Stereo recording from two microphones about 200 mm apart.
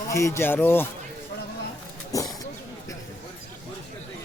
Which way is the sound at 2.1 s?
15° left (ahead or behind).